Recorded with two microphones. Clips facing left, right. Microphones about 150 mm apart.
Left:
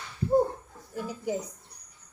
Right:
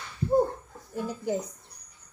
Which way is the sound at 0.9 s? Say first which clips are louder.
Right 2 dB; centre (ahead or behind).